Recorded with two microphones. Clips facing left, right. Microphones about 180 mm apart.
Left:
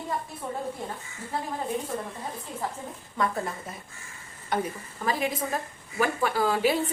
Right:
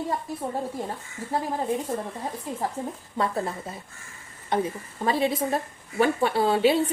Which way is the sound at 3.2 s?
30° right (ahead or behind).